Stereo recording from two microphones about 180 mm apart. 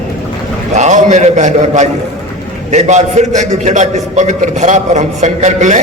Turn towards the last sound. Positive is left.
turn(degrees=-40)  # may be behind; listen again after turning